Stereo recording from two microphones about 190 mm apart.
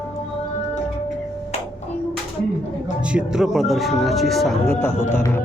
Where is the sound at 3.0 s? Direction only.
5° right (ahead or behind).